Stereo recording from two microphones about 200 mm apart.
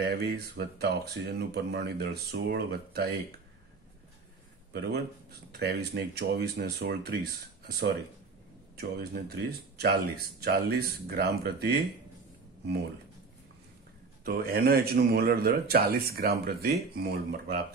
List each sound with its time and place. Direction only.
0.0 s speech: 50° right (ahead or behind)
5.6 s speech: 55° right (ahead or behind)
14.2 s speech: 50° right (ahead or behind)